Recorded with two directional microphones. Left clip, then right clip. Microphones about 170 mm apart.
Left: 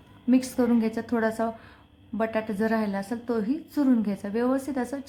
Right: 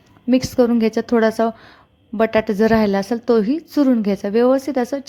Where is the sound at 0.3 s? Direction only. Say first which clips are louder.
Right 8 dB; 30° right (ahead or behind).